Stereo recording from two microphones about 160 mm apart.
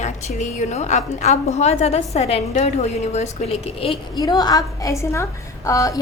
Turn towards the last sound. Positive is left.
turn(degrees=20)  # may be behind; listen again after turning